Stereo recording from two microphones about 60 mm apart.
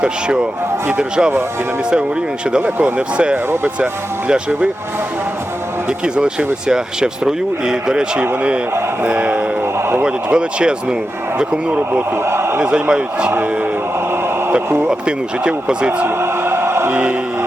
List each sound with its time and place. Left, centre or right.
0.0 s speech: centre
2.5 s speech: right
3.3 s speech: right
4.3 s speech: centre
6.1 s speech: centre
9.7 s a sound: right
10.0 s speech: centre
11.8 s a man's voice: right
12.5 s a man's voice: centre
14.1 s radio: right
14.8 s speech: centre
16.0 s a sound: right
16.9 s speech: right